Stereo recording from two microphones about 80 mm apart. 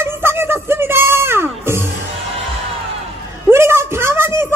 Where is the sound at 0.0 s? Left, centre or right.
Right.